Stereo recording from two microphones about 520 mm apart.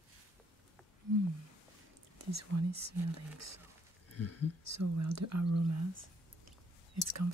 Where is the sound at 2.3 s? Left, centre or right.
Right.